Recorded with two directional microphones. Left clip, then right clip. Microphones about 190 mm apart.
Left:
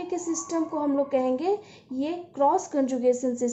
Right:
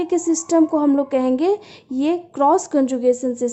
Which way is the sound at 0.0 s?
45° right (ahead or behind).